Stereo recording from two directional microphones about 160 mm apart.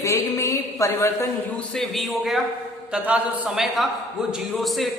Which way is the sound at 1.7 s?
Centre (ahead or behind).